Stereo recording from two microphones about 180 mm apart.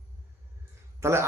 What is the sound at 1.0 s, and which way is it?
Speech, 15° right (ahead or behind).